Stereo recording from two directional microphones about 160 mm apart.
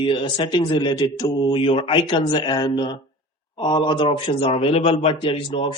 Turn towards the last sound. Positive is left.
turn(degrees=30)  # may be behind; listen again after turning